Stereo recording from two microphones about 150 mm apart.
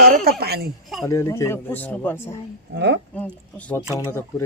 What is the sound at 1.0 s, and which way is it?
Speech, 20° left (ahead or behind).